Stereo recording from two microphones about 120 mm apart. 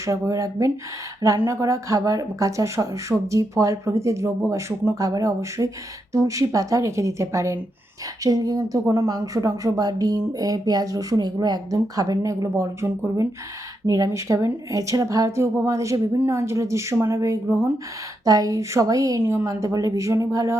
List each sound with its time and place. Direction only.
0.0 s speech: 25° right (ahead or behind)